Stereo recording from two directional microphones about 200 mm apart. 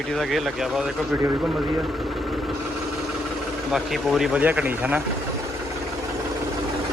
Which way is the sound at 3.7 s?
Centre (ahead or behind).